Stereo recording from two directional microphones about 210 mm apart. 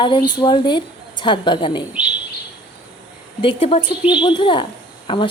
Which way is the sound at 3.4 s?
25° left (ahead or behind).